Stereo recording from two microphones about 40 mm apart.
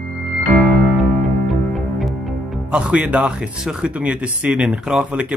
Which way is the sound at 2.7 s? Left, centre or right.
Right.